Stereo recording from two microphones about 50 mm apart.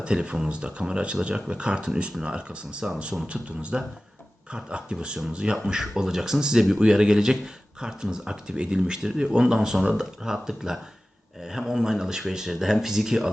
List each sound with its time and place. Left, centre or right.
0.0 s speech: right